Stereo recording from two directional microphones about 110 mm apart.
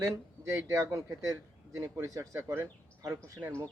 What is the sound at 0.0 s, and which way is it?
Speech, 25° right (ahead or behind).